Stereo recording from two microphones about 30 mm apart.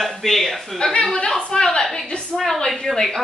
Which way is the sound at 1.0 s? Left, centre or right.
Left.